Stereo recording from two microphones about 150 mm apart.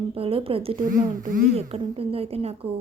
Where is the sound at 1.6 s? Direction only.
40° right (ahead or behind).